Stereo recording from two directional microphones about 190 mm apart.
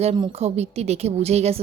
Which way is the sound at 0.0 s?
35° right (ahead or behind).